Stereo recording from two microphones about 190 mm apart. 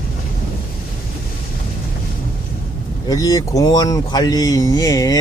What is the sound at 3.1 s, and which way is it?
Speech, 20° left (ahead or behind).